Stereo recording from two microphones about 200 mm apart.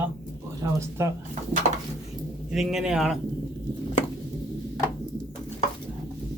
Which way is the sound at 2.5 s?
Centre (ahead or behind).